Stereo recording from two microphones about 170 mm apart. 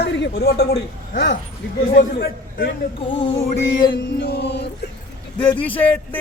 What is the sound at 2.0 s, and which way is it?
Speech, 55° left (ahead or behind).